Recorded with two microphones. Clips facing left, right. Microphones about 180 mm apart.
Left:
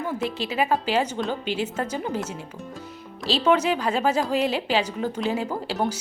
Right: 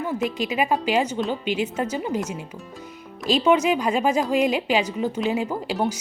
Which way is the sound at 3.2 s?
10° right (ahead or behind).